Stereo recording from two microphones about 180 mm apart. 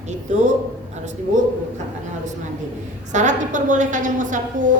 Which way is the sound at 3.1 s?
45° right (ahead or behind).